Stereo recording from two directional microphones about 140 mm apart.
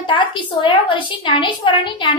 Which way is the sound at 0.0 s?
35° left (ahead or behind).